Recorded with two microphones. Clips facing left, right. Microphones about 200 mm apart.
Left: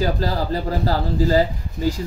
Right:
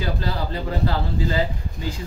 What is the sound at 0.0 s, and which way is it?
Speech, 40° left (ahead or behind).